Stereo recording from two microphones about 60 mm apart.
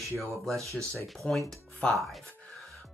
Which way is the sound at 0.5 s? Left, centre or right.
Right.